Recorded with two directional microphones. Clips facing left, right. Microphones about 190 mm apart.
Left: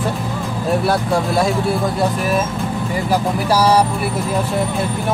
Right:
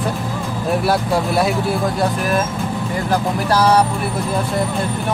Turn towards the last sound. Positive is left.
turn(degrees=10)  # may be behind; listen again after turning